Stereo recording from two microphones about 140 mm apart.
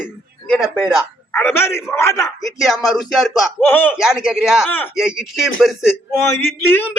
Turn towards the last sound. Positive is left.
turn(degrees=15)  # may be behind; listen again after turning